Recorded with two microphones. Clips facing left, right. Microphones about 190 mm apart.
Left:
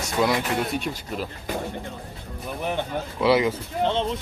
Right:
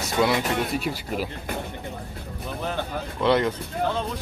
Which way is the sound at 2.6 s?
15° left (ahead or behind).